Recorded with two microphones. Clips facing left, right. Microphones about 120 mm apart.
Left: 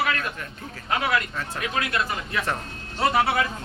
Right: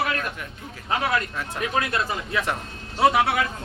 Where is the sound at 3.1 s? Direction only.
Centre (ahead or behind).